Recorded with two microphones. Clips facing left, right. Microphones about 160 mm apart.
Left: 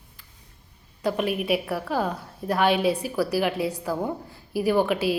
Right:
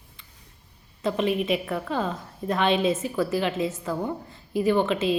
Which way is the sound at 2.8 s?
70° left (ahead or behind).